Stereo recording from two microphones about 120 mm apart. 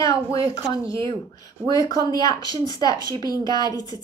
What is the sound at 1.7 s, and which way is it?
A woman's voice, 30° left (ahead or behind).